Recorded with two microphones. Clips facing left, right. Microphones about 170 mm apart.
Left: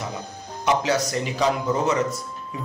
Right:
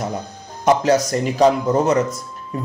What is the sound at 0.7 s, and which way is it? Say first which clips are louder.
Speech: right 6 dB; 45° right (ahead or behind).